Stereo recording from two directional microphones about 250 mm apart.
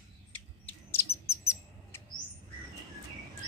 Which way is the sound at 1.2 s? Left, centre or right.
Centre.